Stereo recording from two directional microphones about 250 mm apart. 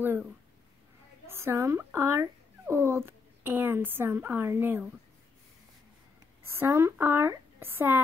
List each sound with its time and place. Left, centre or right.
0.0 s a woman's voice: centre
6.4 s a woman's voice: centre